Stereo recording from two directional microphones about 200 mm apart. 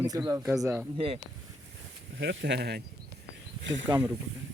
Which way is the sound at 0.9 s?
25° right (ahead or behind).